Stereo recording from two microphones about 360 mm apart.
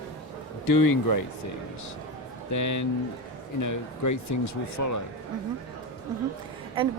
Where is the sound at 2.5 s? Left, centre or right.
Left.